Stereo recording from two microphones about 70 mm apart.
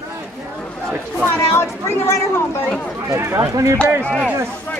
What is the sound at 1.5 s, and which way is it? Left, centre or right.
Speech, left.